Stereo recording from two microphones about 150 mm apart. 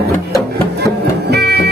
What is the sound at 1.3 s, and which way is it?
Music, 90° right.